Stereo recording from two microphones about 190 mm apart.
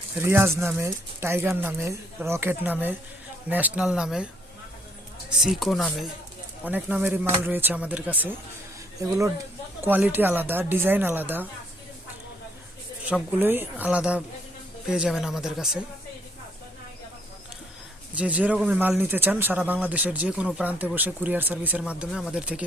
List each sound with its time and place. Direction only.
0.2 s speech: 15° right (ahead or behind)
5.5 s speech: centre (ahead or behind)
6.7 s speech: 10° right (ahead or behind)
13.1 s speech: 10° right (ahead or behind)
18.1 s speech: 5° right (ahead or behind)